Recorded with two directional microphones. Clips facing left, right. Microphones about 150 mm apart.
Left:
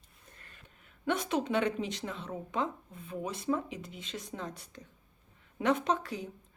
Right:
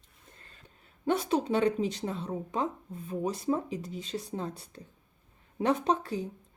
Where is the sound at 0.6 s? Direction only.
35° right (ahead or behind).